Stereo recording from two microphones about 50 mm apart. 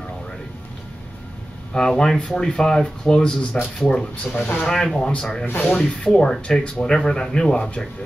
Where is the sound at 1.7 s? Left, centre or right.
Centre.